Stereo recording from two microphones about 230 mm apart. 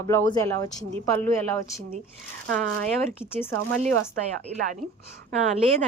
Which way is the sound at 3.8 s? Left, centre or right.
Right.